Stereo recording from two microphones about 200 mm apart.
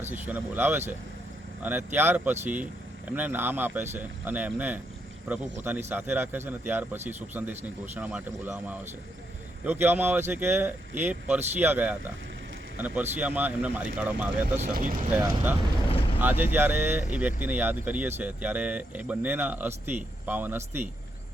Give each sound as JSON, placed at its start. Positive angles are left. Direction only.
{"t": 0.3, "sound": "speech", "side_deg": -10}
{"t": 14.7, "sound": "speech", "side_deg": -40}
{"t": 15.1, "sound": "speech", "side_deg": -10}